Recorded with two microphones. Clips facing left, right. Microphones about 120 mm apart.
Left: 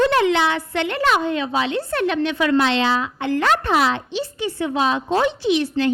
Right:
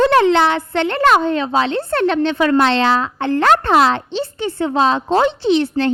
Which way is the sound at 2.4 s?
45° right (ahead or behind).